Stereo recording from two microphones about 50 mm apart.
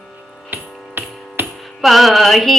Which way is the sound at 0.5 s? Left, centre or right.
Right.